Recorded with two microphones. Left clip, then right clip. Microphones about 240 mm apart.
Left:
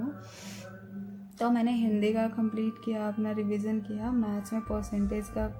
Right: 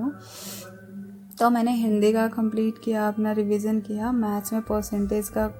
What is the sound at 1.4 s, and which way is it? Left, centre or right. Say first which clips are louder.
A woman's voice: right 7 dB; right.